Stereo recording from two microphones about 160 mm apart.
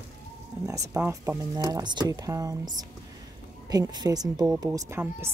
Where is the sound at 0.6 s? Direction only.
20° right (ahead or behind).